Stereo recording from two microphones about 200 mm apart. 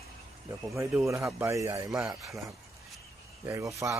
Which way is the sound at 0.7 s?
15° right (ahead or behind).